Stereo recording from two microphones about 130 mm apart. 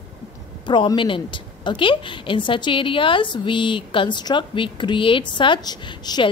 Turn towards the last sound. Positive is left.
turn(degrees=35)  # may be behind; listen again after turning